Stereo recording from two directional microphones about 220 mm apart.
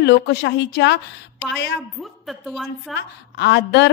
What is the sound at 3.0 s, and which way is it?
Speech, 50° left (ahead or behind).